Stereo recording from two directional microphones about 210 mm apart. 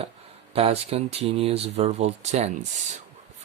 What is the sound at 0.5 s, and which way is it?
Speech, 30° right (ahead or behind).